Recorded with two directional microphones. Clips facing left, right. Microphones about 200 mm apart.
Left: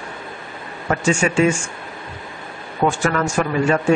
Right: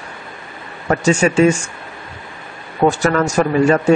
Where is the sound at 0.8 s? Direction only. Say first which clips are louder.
Right 4 dB; 40° right (ahead or behind).